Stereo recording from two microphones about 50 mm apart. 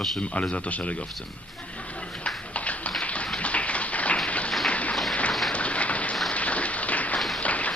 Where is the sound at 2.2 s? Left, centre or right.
Left.